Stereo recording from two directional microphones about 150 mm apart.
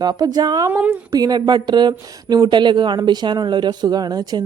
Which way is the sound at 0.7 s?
10° right (ahead or behind).